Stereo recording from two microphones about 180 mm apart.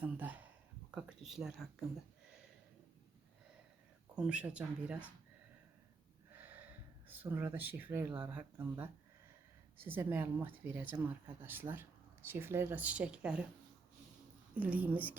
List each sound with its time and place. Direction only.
0.0 s speech: 10° right (ahead or behind)
0.9 s whispering: 5° right (ahead or behind)
4.1 s speech: 5° right (ahead or behind)
6.3 s snort: 10° right (ahead or behind)
7.1 s speech: 10° right (ahead or behind)
14.5 s speech: 10° right (ahead or behind)